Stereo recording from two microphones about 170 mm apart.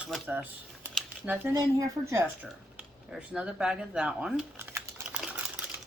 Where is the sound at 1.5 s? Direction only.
20° right (ahead or behind).